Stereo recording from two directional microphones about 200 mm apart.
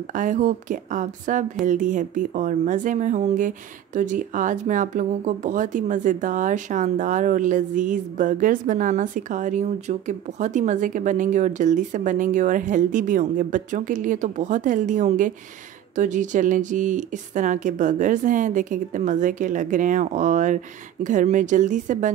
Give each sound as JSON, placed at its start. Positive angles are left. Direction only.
{"t": 0.1, "sound": "speech", "side_deg": -40}